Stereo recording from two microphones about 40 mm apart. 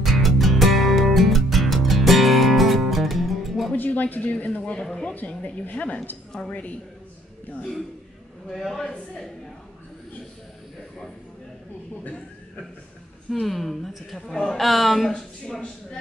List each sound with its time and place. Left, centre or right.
0.0 s music: centre
3.7 s speech: left
4.7 s speech: centre
5.1 s a woman's voice: left
6.3 s speech: left
8.5 s speech: centre
13.5 s speech: centre